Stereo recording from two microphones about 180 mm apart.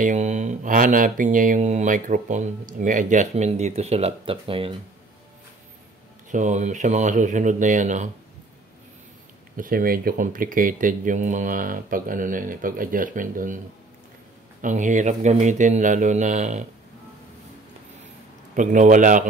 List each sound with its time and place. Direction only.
0.0 s speech: 45° right (ahead or behind)
6.3 s speech: 40° right (ahead or behind)
9.6 s speech: 50° right (ahead or behind)
14.6 s speech: 45° right (ahead or behind)
18.5 s speech: 45° right (ahead or behind)